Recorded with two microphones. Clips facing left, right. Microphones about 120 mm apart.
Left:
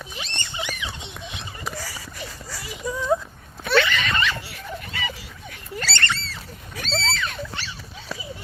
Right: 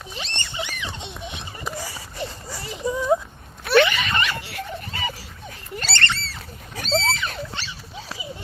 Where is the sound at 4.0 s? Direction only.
10° right (ahead or behind).